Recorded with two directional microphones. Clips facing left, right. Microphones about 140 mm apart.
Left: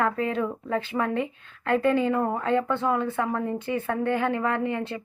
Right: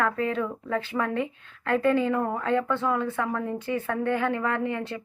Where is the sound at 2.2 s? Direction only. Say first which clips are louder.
Left 1 dB; 15° left (ahead or behind).